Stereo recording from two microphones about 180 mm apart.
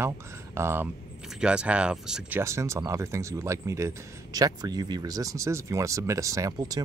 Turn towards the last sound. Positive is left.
turn(degrees=-20)  # may be behind; listen again after turning